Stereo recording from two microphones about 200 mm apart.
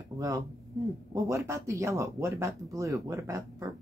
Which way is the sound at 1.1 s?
15° right (ahead or behind).